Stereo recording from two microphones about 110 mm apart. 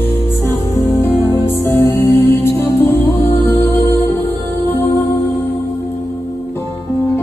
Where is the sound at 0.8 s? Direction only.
20° left (ahead or behind).